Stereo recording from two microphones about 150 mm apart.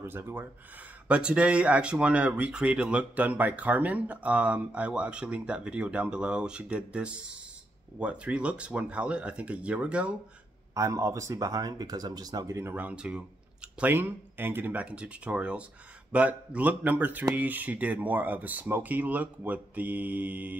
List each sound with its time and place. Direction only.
0.0 s speech: 15° right (ahead or behind)
10.7 s speech: 20° right (ahead or behind)